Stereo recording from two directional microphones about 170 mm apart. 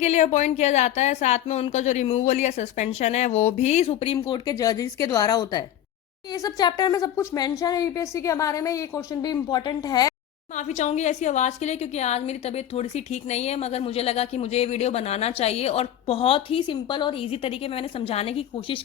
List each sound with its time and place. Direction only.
0.0 s a woman's voice: 40° left (ahead or behind); by 10.2 s 20° left (ahead or behind)
10.5 s a woman's voice: 45° left (ahead or behind)